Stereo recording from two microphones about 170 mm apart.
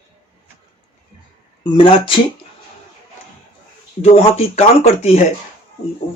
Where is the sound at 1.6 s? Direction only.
30° left (ahead or behind).